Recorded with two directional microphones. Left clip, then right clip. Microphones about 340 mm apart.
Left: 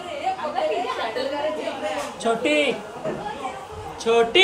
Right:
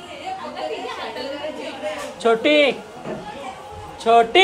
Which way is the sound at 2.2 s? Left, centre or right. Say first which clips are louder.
Right 6 dB; centre.